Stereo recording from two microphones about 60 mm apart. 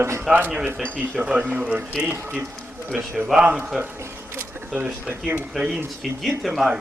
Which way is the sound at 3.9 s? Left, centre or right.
Right.